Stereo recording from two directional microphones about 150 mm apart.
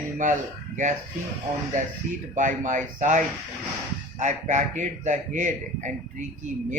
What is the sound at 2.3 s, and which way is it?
Speech, 60° right (ahead or behind).